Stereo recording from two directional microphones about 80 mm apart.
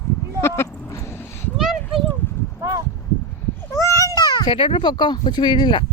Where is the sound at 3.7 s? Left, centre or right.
Left.